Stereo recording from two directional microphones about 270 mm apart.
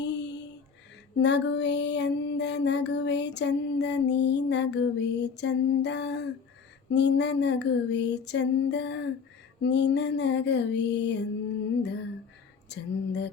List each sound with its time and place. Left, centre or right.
0.0 s music: left
12.6 s music: left